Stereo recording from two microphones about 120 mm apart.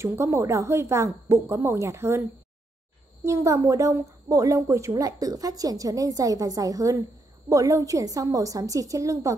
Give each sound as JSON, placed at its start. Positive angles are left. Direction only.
{"t": 0.0, "sound": "a woman's voice", "side_deg": -20}
{"t": 3.3, "sound": "a woman's voice", "side_deg": -25}